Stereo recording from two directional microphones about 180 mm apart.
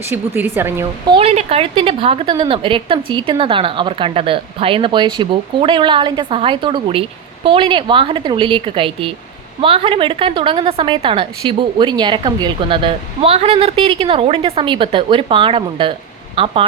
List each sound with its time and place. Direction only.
0.3 s a woman's voice: 10° right (ahead or behind)
1.1 s a woman's voice: 35° right (ahead or behind)